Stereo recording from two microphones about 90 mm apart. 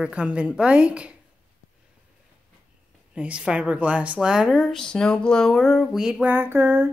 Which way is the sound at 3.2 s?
10° right (ahead or behind).